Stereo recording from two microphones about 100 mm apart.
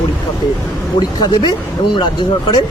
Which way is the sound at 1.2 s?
45° left (ahead or behind).